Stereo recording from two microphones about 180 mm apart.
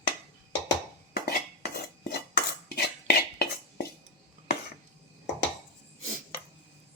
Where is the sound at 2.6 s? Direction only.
60° left (ahead or behind).